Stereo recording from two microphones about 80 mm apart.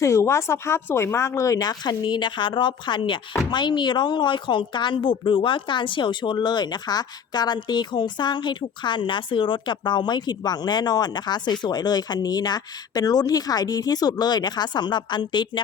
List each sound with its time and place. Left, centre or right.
0.0 s speech: left
3.5 s a woman's voice: left